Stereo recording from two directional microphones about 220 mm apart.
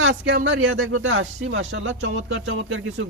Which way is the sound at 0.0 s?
55° right (ahead or behind).